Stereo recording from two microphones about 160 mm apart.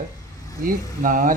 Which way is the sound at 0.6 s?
55° right (ahead or behind).